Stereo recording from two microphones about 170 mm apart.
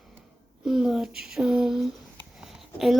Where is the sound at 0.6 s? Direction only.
Centre (ahead or behind).